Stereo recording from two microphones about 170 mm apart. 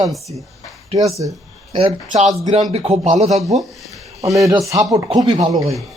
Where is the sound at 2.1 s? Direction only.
40° right (ahead or behind).